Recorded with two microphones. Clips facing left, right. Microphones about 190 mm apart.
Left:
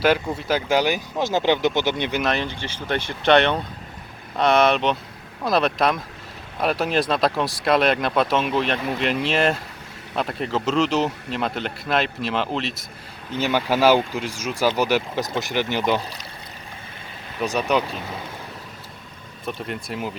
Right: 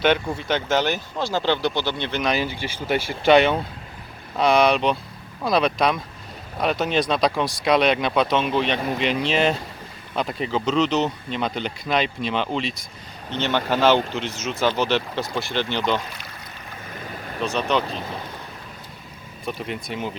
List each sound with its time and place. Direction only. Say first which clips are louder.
0.0 s speech: even; 5° left (ahead or behind)
2.2 s speech: right 1 dB; 5° right (ahead or behind); by 16.0 s 10° left (ahead or behind)
17.4 s speech: left 1 dB; 15° left (ahead or behind)
19.5 s speech: even; centre (ahead or behind)